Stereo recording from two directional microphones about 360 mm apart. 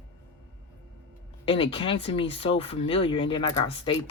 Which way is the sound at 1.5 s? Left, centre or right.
Centre.